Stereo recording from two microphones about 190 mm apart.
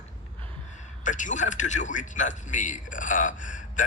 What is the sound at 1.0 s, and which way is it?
A man's voice, 40° left (ahead or behind).